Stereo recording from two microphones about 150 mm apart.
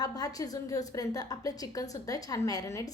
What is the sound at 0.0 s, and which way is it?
A woman's voice, 25° left (ahead or behind).